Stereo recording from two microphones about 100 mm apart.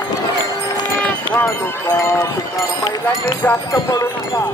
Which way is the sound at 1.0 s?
15° left (ahead or behind).